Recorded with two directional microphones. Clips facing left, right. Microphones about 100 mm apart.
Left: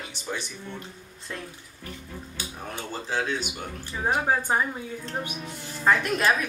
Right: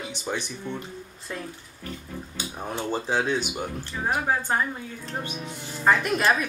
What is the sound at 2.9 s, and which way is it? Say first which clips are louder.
Speech: right 4 dB; 20° right (ahead or behind).